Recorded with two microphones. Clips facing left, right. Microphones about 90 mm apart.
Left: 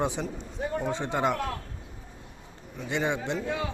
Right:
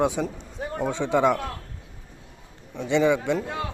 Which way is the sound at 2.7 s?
65° right (ahead or behind).